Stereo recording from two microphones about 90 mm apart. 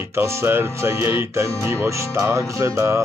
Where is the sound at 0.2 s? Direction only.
25° right (ahead or behind).